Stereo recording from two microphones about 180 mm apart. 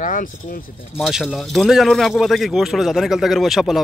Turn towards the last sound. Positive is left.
turn(degrees=0)  # may be behind; listen again after turning